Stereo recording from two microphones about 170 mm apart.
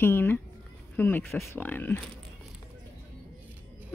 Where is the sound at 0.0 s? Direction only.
15° left (ahead or behind).